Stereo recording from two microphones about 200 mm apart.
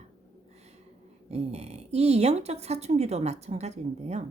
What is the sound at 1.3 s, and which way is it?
A woman's voice, 30° right (ahead or behind).